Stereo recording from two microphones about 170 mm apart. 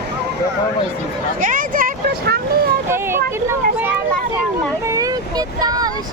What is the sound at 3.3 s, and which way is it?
Speech, 15° right (ahead or behind).